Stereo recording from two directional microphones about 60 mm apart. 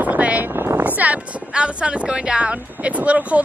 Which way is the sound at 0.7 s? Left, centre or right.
Right.